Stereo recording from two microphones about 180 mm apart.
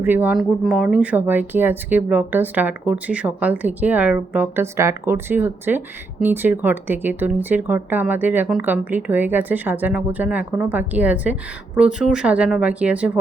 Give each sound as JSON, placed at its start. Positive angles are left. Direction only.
{"t": 0.0, "sound": "speech", "side_deg": -10}